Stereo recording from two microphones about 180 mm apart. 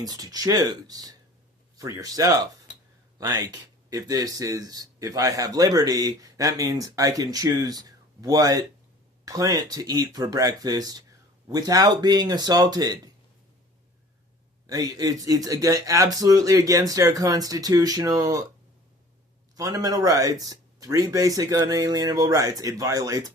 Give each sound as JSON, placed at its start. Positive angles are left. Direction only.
{"t": 0.0, "sound": "speech", "side_deg": -20}
{"t": 14.7, "sound": "speech", "side_deg": -20}
{"t": 19.5, "sound": "speech", "side_deg": -20}